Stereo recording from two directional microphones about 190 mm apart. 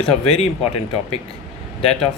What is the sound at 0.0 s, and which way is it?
Speech, 30° left (ahead or behind).